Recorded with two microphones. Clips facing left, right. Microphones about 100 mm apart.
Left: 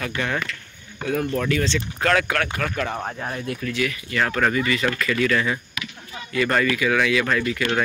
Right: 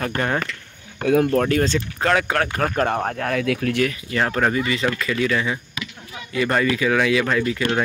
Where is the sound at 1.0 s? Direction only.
70° right (ahead or behind).